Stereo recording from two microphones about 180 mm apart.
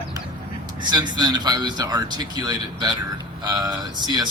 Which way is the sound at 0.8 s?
25° right (ahead or behind).